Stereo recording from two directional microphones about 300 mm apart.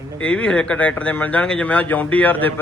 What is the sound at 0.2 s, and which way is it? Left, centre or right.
A man's voice, centre.